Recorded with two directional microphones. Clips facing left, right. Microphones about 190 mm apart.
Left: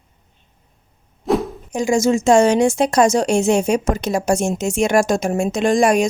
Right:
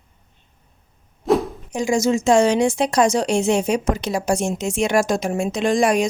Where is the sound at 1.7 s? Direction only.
45° left (ahead or behind).